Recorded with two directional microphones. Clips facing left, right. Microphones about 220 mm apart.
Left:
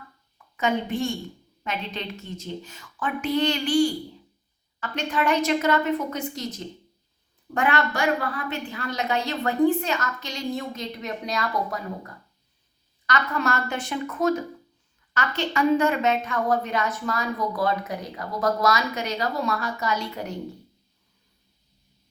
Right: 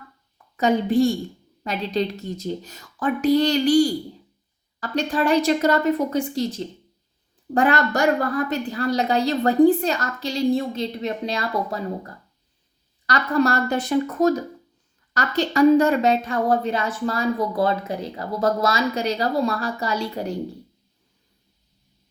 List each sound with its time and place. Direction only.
0.5 s a woman's voice: 35° right (ahead or behind)